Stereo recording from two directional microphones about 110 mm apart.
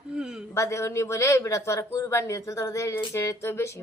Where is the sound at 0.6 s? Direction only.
25° left (ahead or behind).